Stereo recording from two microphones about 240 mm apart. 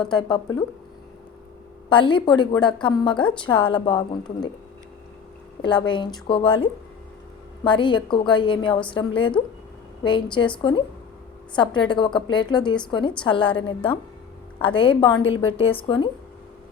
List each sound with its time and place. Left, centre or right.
0.0 s a woman's voice: centre
1.9 s a woman's voice: centre
5.9 s a woman's voice: centre